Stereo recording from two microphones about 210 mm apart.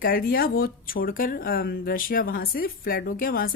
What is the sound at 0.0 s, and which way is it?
Speech, 45° left (ahead or behind).